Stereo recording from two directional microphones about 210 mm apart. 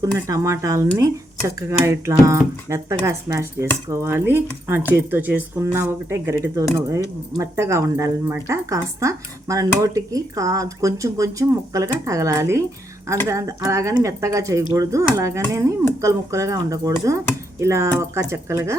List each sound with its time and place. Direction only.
0.0 s speech: 15° right (ahead or behind)